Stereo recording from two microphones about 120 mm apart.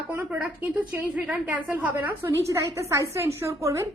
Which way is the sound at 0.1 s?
15° right (ahead or behind).